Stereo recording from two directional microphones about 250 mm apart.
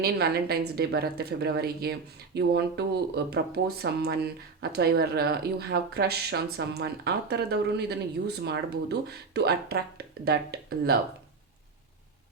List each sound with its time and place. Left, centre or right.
0.0 s speech: right